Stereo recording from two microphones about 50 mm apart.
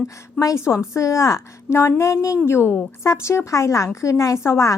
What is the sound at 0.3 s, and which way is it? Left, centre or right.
A woman's voice, left.